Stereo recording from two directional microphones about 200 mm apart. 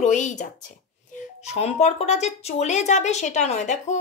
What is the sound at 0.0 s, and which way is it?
Speech, 35° left (ahead or behind).